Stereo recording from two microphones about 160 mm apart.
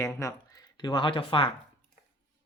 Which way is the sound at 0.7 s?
30° left (ahead or behind).